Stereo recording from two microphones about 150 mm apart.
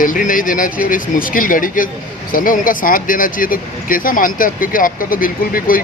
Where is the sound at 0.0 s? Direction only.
65° left (ahead or behind).